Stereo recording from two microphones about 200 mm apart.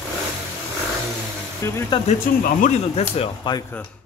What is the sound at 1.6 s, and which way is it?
Speech, 10° left (ahead or behind).